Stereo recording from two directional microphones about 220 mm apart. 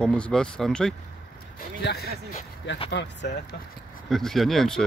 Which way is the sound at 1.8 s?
45° left (ahead or behind).